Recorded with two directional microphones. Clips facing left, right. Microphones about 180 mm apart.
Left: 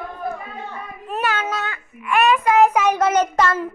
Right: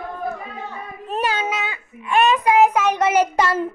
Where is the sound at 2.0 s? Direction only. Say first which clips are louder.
Even; 25° right (ahead or behind).